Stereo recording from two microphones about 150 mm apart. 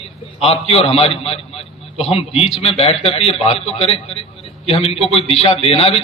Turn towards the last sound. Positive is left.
turn(degrees=40)  # may be behind; listen again after turning